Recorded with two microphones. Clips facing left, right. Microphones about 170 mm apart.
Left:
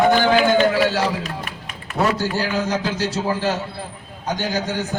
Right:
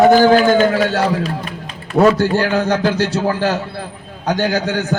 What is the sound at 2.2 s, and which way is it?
A man's voice, 60° right (ahead or behind).